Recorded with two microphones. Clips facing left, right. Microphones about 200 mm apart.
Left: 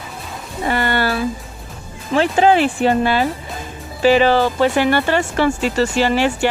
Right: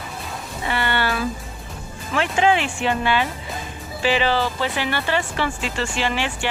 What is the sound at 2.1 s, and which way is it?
Speech, 35° left (ahead or behind).